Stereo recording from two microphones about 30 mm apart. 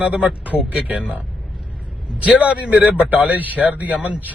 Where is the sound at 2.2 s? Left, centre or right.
Right.